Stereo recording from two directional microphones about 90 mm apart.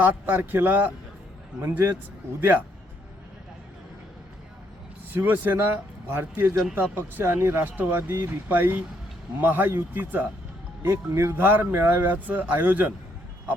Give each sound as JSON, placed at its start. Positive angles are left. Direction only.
{"t": 0.0, "sound": "speech", "side_deg": -20}
{"t": 2.4, "sound": "speech", "side_deg": -20}
{"t": 5.1, "sound": "speech", "side_deg": -20}